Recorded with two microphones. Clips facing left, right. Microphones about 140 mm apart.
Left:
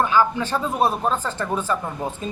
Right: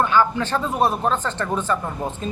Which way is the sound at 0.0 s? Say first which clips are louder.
Even; 15° left (ahead or behind).